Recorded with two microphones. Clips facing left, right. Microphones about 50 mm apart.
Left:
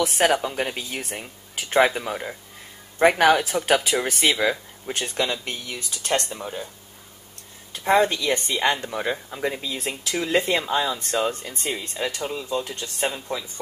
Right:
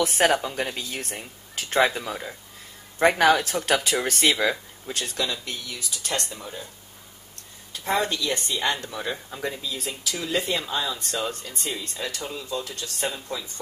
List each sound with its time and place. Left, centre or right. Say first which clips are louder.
0.0 s a woman's voice: left 1 dB; centre
0.4 s speech: left 2 dB; centre
4.8 s speech: left 3 dB; left
7.7 s speech: left 6 dB; left
9.8 s speech: left 6 dB; left; by 13.5 s centre